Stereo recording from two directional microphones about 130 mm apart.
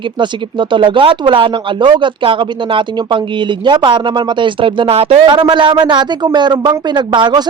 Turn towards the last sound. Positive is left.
turn(degrees=-35)  # may be behind; listen again after turning